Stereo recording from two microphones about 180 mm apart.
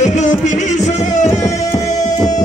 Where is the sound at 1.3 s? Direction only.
20° left (ahead or behind).